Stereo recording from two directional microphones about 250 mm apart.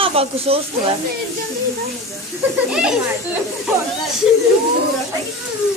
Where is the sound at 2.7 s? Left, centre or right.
Centre.